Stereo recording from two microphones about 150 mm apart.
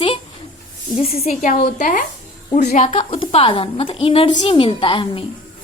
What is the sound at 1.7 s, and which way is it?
A woman's voice, 60° left (ahead or behind).